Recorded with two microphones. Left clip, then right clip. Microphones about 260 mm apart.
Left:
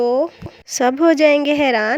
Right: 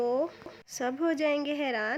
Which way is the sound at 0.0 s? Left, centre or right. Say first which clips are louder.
Left 12 dB; left.